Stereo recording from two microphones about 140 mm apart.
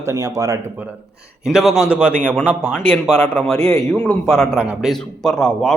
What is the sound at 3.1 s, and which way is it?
A man's voice, 10° left (ahead or behind).